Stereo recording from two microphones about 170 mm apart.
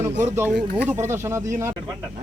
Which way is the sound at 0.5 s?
90° right.